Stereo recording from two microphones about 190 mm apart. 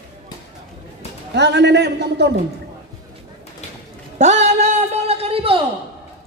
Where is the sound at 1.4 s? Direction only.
65° right (ahead or behind).